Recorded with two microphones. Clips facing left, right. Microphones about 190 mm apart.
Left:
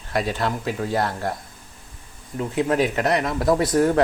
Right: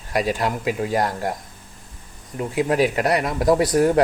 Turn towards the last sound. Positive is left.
turn(degrees=-10)  # may be behind; listen again after turning